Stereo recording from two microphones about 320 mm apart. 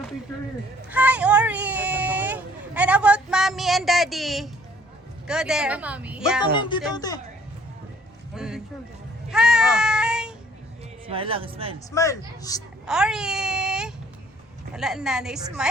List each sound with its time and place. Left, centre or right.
0.9 s a sound: centre
5.3 s speech: centre
6.5 s a woman's voice: centre
8.4 s speech: centre
9.3 s a sound: centre
11.1 s speech: centre
11.9 s a woman's voice: centre
12.8 s speech: centre